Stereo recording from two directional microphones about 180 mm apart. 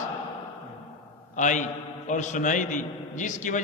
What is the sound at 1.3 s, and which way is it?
A man's voice, 45° left (ahead or behind).